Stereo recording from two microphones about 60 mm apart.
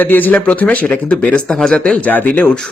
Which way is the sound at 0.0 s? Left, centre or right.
Left.